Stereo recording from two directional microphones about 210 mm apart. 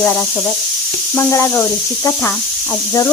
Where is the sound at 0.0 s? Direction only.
5° left (ahead or behind).